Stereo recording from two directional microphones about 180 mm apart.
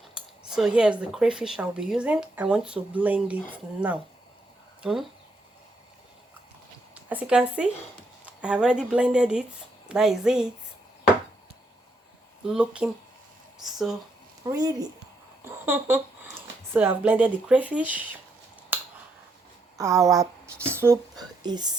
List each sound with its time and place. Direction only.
0.1 s speech: 5° right (ahead or behind)
6.9 s speech: 5° right (ahead or behind)
12.5 s speech: 5° right (ahead or behind)
14.4 s speech: 20° right (ahead or behind)
18.7 s a sound: 10° right (ahead or behind)
19.7 s speech: 15° right (ahead or behind)